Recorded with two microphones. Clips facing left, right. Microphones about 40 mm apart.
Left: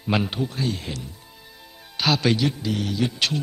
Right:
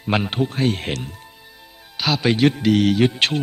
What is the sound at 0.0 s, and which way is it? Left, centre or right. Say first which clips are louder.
Speech: right 2 dB; right.